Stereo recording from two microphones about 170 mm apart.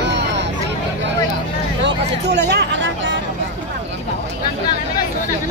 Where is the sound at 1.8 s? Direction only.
85° right.